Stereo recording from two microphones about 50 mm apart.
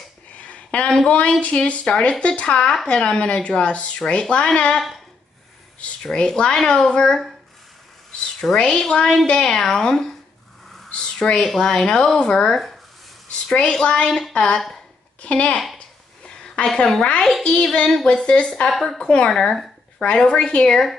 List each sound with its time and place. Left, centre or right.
0.4 s a sound: left
1.0 s speech: left
4.7 s speech: centre
6.1 s a woman's voice: centre
8.4 s a woman's voice: centre
16.6 s a woman's voice: centre
18.7 s a woman's voice: centre
18.9 s a woman's voice: centre
20.0 s a woman's voice: centre